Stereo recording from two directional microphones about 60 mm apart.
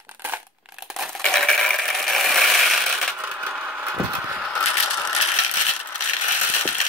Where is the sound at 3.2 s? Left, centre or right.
Right.